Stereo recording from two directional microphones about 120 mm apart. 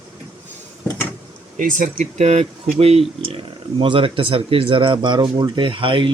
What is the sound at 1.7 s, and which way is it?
Speech, 90° right.